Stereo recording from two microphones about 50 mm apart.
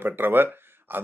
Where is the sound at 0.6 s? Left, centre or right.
Right.